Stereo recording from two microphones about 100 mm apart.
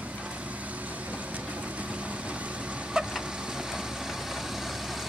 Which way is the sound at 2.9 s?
5° right (ahead or behind).